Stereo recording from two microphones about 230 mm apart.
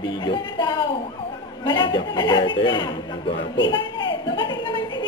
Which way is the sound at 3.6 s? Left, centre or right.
Centre.